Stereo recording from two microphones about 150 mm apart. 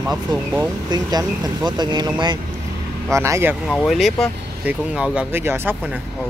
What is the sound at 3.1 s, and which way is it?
Speech, 20° right (ahead or behind).